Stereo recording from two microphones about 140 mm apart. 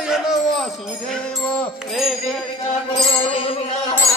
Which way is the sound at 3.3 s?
40° left (ahead or behind).